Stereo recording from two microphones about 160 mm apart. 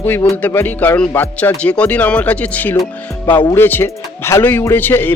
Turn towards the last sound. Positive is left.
turn(degrees=10)  # may be behind; listen again after turning